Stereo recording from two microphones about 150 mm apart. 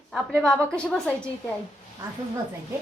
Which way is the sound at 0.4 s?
5° left (ahead or behind).